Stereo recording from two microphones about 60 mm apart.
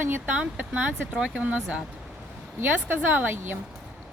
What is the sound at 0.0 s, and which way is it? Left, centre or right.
Speech, right.